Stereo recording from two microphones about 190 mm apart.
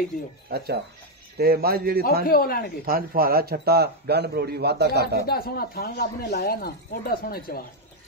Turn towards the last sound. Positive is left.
turn(degrees=55)  # may be behind; listen again after turning